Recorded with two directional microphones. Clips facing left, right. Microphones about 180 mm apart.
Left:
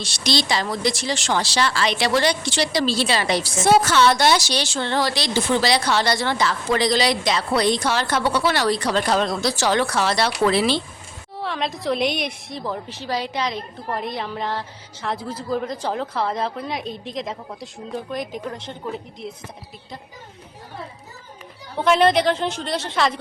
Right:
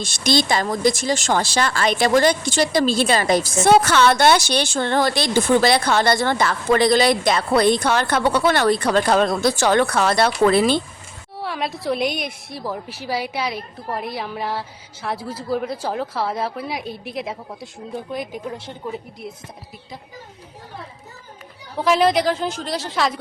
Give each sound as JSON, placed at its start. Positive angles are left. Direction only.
{"t": 0.0, "sound": "speech", "side_deg": -50}
{"t": 11.4, "sound": "a woman's voice", "side_deg": -5}
{"t": 21.8, "sound": "a woman's voice", "side_deg": 0}